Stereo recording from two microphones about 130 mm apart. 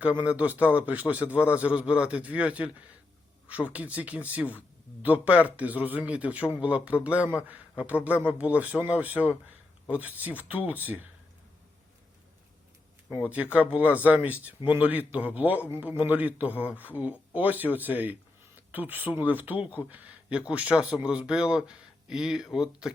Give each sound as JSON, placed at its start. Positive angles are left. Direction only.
{"t": 0.0, "sound": "a man's voice", "side_deg": -10}
{"t": 13.1, "sound": "a man's voice", "side_deg": -10}